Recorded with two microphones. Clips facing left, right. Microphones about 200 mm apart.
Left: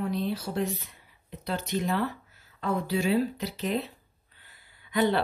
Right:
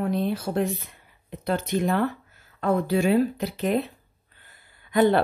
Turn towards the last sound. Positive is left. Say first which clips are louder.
# right 6 dB
turn(degrees=-50)  # may be behind; listen again after turning